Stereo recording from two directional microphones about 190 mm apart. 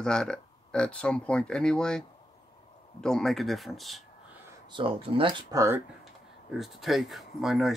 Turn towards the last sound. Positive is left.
turn(degrees=0)  # may be behind; listen again after turning